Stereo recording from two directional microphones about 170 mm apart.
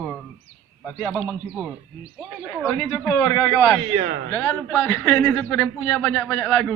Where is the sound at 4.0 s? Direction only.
75° right (ahead or behind).